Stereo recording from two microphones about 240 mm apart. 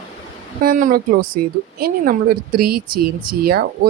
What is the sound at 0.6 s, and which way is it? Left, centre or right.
A woman's voice, right.